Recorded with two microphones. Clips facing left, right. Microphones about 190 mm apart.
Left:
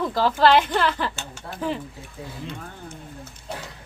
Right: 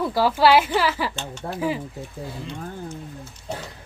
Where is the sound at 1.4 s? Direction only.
45° right (ahead or behind).